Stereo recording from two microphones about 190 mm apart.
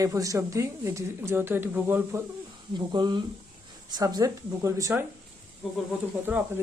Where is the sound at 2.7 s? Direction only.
20° right (ahead or behind).